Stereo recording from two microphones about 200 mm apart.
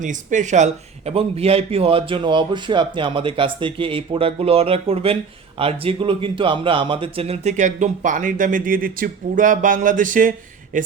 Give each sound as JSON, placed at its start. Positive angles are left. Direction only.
{"t": 0.0, "sound": "a man's voice", "side_deg": -40}